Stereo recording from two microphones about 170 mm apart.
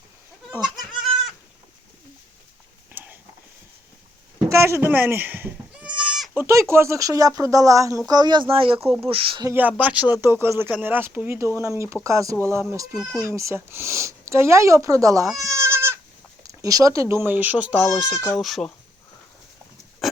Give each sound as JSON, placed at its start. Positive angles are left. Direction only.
{"t": 2.9, "sound": "a sound", "side_deg": -10}
{"t": 4.4, "sound": "goat", "side_deg": -15}
{"t": 6.5, "sound": "speech", "side_deg": -15}
{"t": 9.5, "sound": "speech", "side_deg": -10}
{"t": 15.4, "sound": "goat", "side_deg": -20}
{"t": 16.4, "sound": "speech", "side_deg": -20}
{"t": 20.0, "sound": "a sound", "side_deg": 0}